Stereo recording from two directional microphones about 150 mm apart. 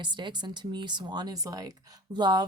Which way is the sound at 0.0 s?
30° right (ahead or behind).